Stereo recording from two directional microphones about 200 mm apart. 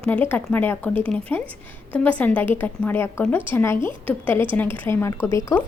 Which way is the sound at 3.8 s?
25° right (ahead or behind).